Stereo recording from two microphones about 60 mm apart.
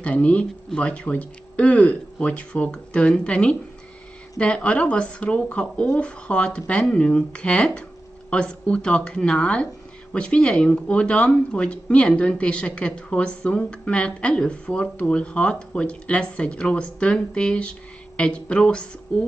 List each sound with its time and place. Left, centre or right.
0.0 s a woman's voice: left